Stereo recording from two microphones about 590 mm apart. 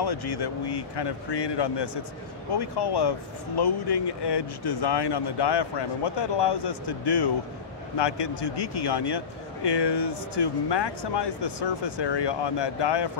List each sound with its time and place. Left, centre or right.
0.0 s a man's voice: left